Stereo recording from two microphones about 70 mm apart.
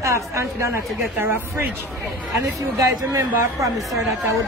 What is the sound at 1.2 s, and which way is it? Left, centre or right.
Speech, right.